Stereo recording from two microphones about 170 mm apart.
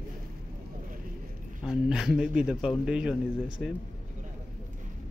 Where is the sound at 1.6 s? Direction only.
5° right (ahead or behind).